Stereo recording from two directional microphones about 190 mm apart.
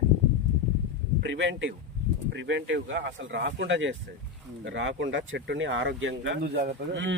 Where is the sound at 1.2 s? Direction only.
70° right (ahead or behind).